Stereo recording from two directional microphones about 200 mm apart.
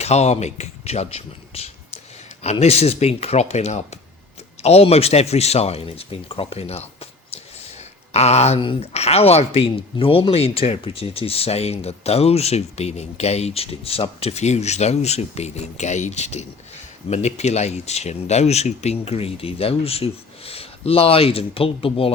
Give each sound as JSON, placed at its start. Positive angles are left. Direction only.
{"t": 0.0, "sound": "speech", "side_deg": 35}